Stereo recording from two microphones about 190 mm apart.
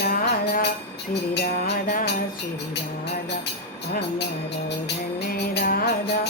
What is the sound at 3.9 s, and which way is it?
Music, 60° left (ahead or behind).